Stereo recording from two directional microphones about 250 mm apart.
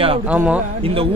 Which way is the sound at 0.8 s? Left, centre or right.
Right.